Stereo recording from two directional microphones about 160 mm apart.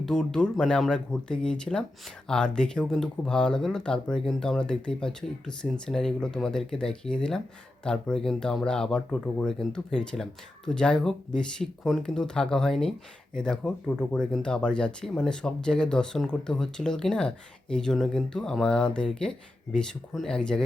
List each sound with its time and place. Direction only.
0.0 s speech: 5° left (ahead or behind)